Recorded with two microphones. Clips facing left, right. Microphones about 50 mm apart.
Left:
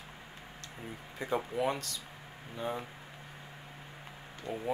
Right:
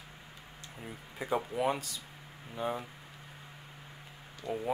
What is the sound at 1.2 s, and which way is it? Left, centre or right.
Speech, centre.